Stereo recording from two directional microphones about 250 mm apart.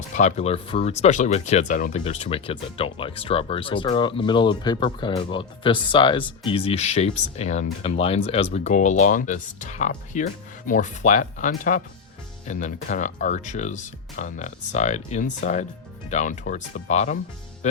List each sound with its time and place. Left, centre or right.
0.2 s speech: left